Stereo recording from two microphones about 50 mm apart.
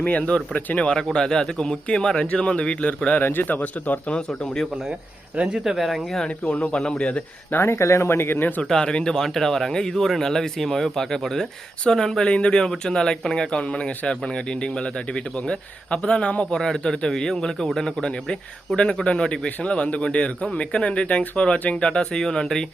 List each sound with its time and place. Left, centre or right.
0.0 s speech: left
0.9 s speech: centre
3.2 s speech: left
4.3 s speech: centre
5.6 s speech: centre
6.2 s speech: left
7.6 s speech: left
8.6 s speech: centre
16.6 s speech: centre
18.0 s speech: centre